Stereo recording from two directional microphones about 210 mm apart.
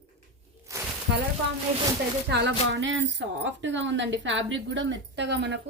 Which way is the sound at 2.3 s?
55° right (ahead or behind).